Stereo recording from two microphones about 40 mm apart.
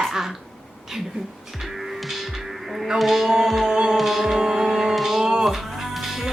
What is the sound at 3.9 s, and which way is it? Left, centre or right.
Music, centre.